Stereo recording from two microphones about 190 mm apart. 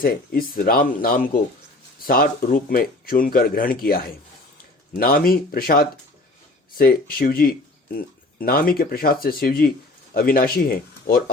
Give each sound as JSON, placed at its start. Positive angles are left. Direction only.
{"t": 0.0, "sound": "speech", "side_deg": 50}